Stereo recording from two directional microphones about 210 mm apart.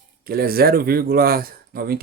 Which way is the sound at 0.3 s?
45° right (ahead or behind).